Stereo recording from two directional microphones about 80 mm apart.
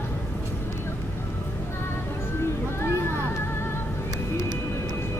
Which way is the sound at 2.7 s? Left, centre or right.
Left.